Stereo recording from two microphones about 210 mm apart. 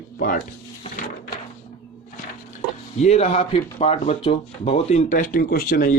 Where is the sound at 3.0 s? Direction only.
30° left (ahead or behind).